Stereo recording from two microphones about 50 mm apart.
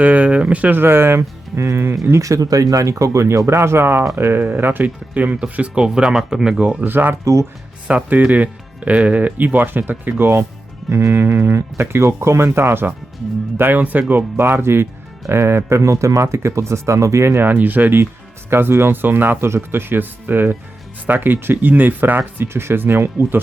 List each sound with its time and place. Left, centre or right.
0.0 s a sound: right
0.7 s speech: right
2.1 s speech: right
5.8 s speech: centre
6.6 s speech: right
6.8 s speech: right
7.9 s speech: right
10.2 s speech: right
13.6 s speech: right
17.4 s speech: right
18.5 s speech: right
22.4 s speech: right